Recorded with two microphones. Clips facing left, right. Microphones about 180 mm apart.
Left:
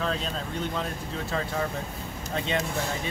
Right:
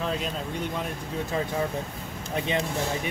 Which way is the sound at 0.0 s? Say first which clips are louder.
Right 1 dB; 10° right (ahead or behind).